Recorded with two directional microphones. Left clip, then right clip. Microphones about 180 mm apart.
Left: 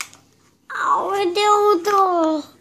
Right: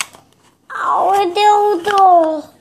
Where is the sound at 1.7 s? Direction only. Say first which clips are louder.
Right 6 dB; 70° left (ahead or behind).